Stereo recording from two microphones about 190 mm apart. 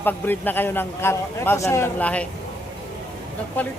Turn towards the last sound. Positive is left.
turn(degrees=10)  # may be behind; listen again after turning